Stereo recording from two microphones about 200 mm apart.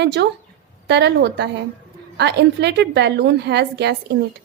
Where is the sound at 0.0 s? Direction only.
60° right (ahead or behind).